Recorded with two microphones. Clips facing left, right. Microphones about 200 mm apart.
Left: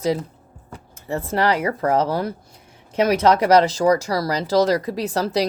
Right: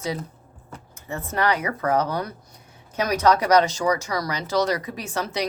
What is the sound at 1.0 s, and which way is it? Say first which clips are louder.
Speech: left 4 dB; 30° left (ahead or behind).